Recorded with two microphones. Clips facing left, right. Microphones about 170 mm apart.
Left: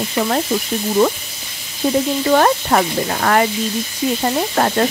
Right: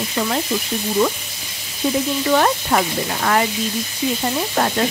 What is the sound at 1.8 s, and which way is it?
Sizzle, 45° left (ahead or behind).